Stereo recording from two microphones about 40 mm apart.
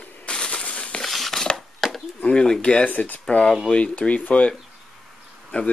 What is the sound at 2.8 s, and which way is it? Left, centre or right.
Speech, left.